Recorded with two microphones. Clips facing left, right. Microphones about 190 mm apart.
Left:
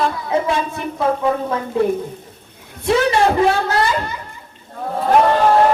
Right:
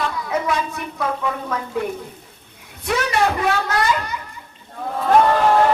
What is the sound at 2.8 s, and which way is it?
Speech, 30° left (ahead or behind).